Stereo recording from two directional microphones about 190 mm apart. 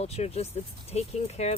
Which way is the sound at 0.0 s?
35° left (ahead or behind).